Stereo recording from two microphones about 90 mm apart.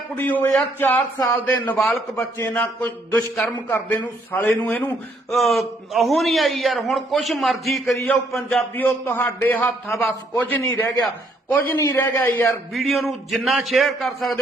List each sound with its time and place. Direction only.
0.2 s a man's voice: 20° left (ahead or behind)
2.4 s a man's voice: 20° left (ahead or behind)
5.3 s a man's voice: centre (ahead or behind)
8.7 s a man's voice: 20° left (ahead or behind)
9.9 s a man's voice: centre (ahead or behind)
10.3 s a man's voice: 20° left (ahead or behind)
10.6 s a man's voice: 35° left (ahead or behind)
11.4 s a man's voice: 20° left (ahead or behind)
12.7 s a man's voice: centre (ahead or behind)